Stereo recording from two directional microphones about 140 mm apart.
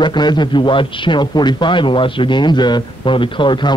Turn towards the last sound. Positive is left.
turn(degrees=35)  # may be behind; listen again after turning